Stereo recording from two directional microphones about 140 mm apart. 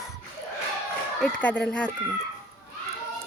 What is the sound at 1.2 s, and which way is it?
Speech, 10° left (ahead or behind).